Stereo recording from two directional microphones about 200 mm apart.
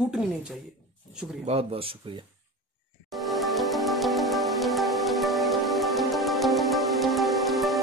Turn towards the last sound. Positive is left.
turn(degrees=0)  # may be behind; listen again after turning